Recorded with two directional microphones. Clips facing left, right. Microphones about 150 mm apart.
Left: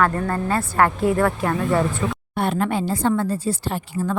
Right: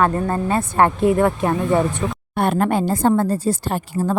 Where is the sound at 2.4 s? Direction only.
50° right (ahead or behind).